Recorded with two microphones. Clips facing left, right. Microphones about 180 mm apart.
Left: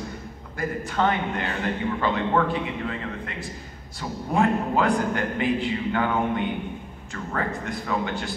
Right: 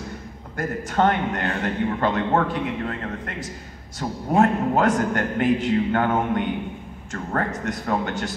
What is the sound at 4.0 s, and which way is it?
A man's voice, 45° right (ahead or behind).